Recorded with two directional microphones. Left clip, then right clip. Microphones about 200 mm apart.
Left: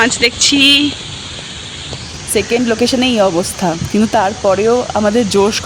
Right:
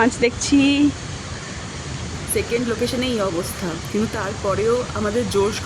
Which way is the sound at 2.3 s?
40° left (ahead or behind).